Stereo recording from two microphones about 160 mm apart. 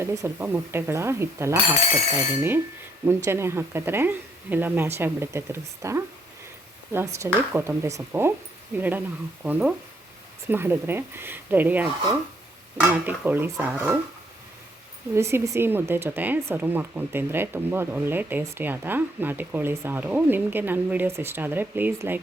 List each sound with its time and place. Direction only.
0.0 s speech: 20° right (ahead or behind)
3.1 s speech: 15° right (ahead or behind)
15.1 s speech: 15° right (ahead or behind)